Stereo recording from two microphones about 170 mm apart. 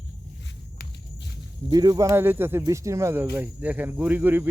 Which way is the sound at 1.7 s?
20° right (ahead or behind).